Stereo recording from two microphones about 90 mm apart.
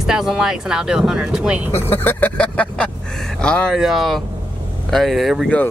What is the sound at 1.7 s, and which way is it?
Speech, 25° left (ahead or behind).